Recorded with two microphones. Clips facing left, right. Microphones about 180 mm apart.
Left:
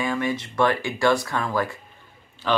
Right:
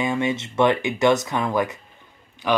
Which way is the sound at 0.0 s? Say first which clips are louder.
Right 2 dB; 20° right (ahead or behind).